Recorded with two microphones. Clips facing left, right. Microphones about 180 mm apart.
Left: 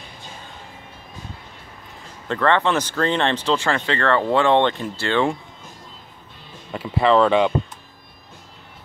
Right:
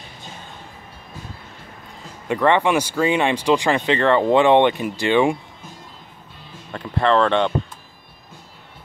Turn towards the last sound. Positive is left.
turn(degrees=5)  # may be behind; listen again after turning